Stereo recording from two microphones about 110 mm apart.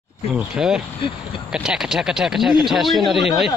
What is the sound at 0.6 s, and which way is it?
Speech, 5° right (ahead or behind).